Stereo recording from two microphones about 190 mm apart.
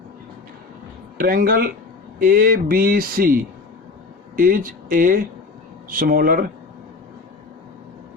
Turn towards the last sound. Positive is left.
turn(degrees=-50)  # may be behind; listen again after turning